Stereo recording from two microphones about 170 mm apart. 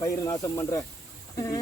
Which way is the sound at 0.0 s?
20° left (ahead or behind).